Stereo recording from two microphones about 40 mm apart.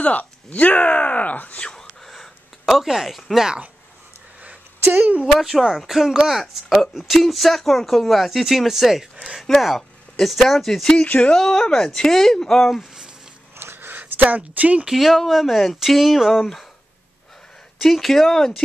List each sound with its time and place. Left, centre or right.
0.0 s speech: left
1.8 s a sound: centre
5.3 s speech: centre
13.7 s a sound: right
14.9 s speech: centre
17.8 s speech: centre